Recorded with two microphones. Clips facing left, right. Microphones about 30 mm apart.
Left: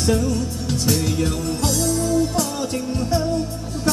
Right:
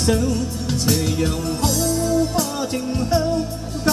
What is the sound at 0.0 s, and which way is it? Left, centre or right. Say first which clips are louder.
Music: right 1 dB; centre.